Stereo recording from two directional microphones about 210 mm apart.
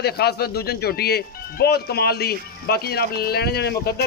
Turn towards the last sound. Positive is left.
turn(degrees=50)  # may be behind; listen again after turning